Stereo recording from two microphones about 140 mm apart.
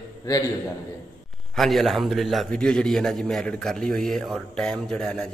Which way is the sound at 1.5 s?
Centre (ahead or behind).